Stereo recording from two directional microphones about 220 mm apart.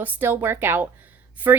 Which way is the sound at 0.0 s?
10° right (ahead or behind).